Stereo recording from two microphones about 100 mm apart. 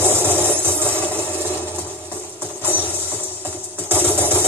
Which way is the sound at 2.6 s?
20° left (ahead or behind).